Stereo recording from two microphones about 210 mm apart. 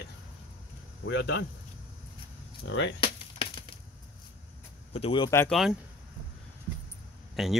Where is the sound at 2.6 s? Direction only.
60° left (ahead or behind).